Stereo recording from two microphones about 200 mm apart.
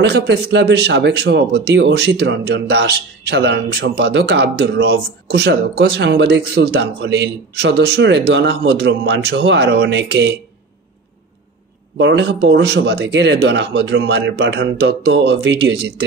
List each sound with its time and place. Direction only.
0.0 s speech: 60° right (ahead or behind)
12.0 s speech: 60° right (ahead or behind)